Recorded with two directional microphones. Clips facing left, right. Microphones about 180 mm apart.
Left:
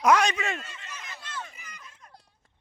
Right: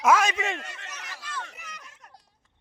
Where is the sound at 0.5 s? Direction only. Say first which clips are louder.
Right 1 dB; 70° right (ahead or behind).